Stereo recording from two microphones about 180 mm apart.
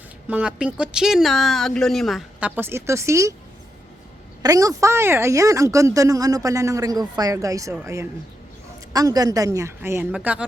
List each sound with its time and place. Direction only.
0.3 s speech: 5° right (ahead or behind)
2.6 s speech: 15° right (ahead or behind)
4.4 s speech: 20° right (ahead or behind)